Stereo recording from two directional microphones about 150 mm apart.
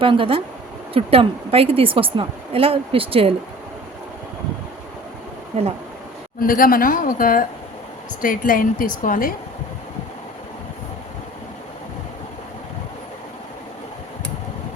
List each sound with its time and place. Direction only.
0.0 s a woman's voice: 35° right (ahead or behind)
5.5 s speech: 45° right (ahead or behind)
6.4 s a woman's voice: 70° left (ahead or behind)